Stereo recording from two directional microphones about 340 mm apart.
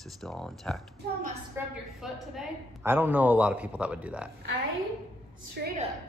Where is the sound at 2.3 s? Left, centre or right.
Centre.